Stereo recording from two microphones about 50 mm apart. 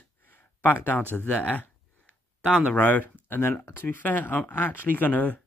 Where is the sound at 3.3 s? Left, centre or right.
Left.